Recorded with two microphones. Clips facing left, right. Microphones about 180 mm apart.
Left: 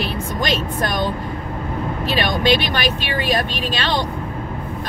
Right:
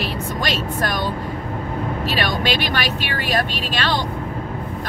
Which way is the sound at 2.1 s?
15° left (ahead or behind).